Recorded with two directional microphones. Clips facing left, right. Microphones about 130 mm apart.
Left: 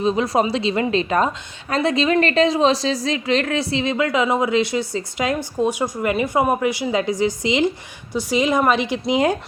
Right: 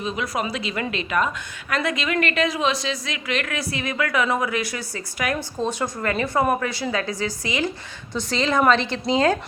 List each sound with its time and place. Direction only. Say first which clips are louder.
0.0 s a woman's voice: left 8 dB; 35° left (ahead or behind); by 9.4 s 15° left (ahead or behind)